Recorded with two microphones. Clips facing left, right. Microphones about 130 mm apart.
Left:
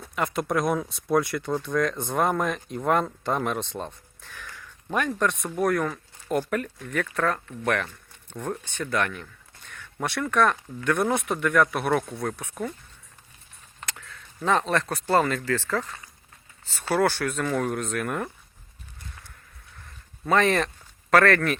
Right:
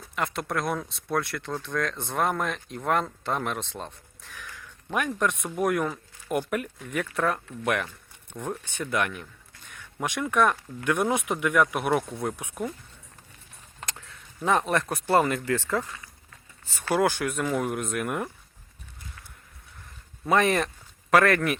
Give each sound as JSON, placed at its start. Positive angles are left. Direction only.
{"t": 0.2, "sound": "speech", "side_deg": 0}
{"t": 13.9, "sound": "a sound", "side_deg": -20}
{"t": 15.1, "sound": "speech", "side_deg": -15}
{"t": 16.9, "sound": "speech", "side_deg": -15}
{"t": 20.2, "sound": "speech", "side_deg": -15}